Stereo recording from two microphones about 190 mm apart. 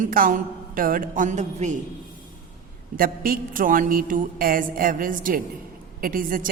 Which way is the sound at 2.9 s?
50° right (ahead or behind).